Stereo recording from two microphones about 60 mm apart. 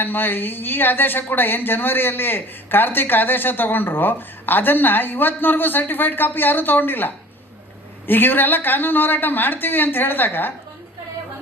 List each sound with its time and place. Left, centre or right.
0.0 s speech: left